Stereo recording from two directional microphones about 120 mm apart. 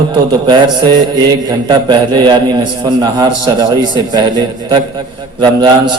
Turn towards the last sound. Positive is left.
turn(degrees=-40)  # may be behind; listen again after turning